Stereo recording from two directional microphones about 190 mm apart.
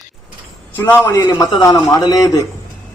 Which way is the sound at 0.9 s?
10° left (ahead or behind).